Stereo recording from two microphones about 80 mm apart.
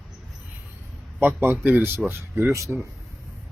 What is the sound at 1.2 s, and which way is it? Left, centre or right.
Speech, right.